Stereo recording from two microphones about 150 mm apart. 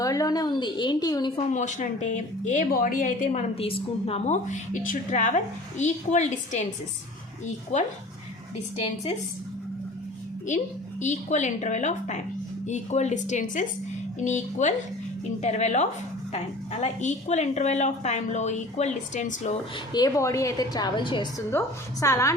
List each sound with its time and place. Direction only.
0.0 s a woman's voice: 25° left (ahead or behind)
1.4 s speech: 50° left (ahead or behind)
3.5 s a woman's voice: 40° left (ahead or behind)
10.5 s a woman's voice: 55° left (ahead or behind)
19.9 s a woman's voice: 25° left (ahead or behind)
22.0 s a woman's voice: 20° left (ahead or behind)